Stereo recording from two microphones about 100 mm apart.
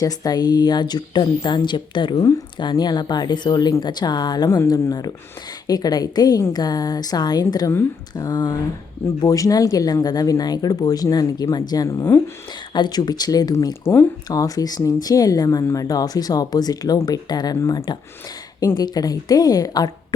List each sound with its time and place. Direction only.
0.0 s speech: 40° left (ahead or behind)
7.7 s speech: 30° left (ahead or behind)
11.9 s speech: 30° left (ahead or behind)
12.7 s speech: 45° left (ahead or behind)
13.8 s speech: 20° left (ahead or behind)
14.3 s speech: 35° left (ahead or behind)